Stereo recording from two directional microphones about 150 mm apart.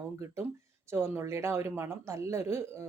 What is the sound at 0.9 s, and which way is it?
Speech, 15° right (ahead or behind).